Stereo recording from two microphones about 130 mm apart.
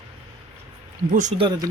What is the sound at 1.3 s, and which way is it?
Speech, 35° right (ahead or behind).